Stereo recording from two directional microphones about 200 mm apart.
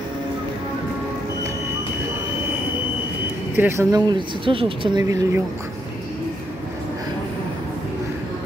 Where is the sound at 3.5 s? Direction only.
15° right (ahead or behind).